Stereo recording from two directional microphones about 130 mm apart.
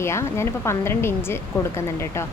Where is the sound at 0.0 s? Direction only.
20° left (ahead or behind).